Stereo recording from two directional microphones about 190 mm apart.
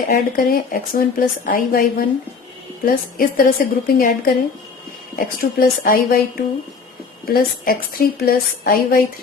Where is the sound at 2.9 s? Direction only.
50° left (ahead or behind).